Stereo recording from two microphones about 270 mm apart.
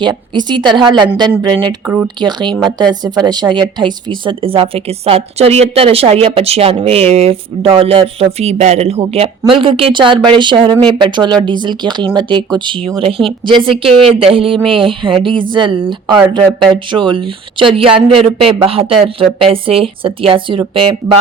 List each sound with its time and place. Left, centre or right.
0.0 s a woman's voice: centre